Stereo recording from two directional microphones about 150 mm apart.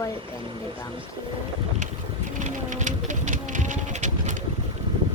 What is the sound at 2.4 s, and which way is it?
Pigeon, 55° right (ahead or behind).